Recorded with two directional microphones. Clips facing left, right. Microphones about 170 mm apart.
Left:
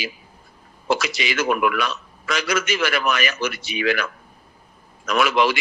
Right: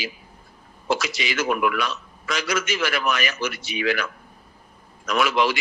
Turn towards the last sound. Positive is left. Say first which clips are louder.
# left 2 dB
turn(degrees=70)  # may be behind; listen again after turning